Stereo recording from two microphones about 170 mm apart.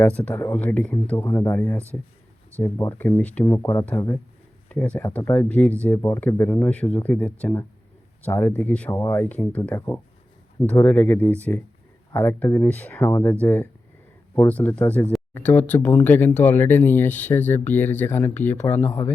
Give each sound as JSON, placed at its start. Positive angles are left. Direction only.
{"t": 0.0, "sound": "speech", "side_deg": 10}
{"t": 1.1, "sound": "speech", "side_deg": 20}